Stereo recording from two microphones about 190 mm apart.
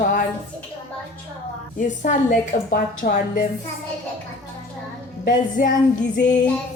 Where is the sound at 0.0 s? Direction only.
45° left (ahead or behind).